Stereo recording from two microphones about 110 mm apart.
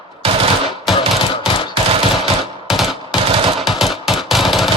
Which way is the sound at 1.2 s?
55° left (ahead or behind).